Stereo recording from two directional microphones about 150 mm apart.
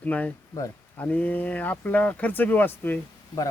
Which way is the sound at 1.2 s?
10° left (ahead or behind).